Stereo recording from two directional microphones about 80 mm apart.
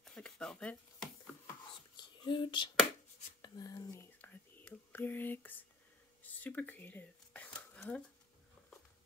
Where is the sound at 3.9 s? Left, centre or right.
Left.